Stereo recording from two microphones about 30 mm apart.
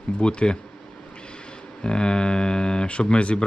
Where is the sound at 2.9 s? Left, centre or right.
Left.